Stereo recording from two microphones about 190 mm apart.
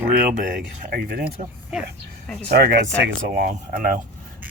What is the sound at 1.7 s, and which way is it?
Speech, 5° right (ahead or behind).